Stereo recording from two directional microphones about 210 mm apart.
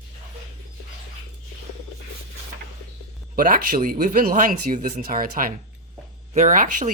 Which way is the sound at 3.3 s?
40° right (ahead or behind).